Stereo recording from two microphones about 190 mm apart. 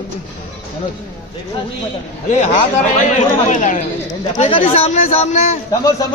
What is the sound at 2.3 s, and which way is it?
A man's voice, 40° left (ahead or behind).